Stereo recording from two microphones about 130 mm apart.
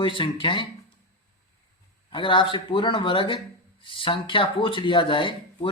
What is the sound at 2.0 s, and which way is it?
Speech, 40° left (ahead or behind).